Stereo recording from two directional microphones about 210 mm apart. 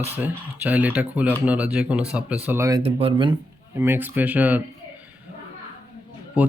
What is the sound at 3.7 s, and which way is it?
Speech, 10° right (ahead or behind).